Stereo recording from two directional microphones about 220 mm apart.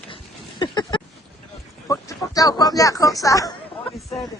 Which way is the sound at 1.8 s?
15° left (ahead or behind).